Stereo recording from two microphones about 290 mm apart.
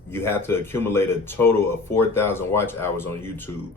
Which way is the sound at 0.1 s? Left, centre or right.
Centre.